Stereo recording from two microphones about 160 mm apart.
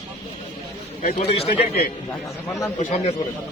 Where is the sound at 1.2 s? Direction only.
40° left (ahead or behind).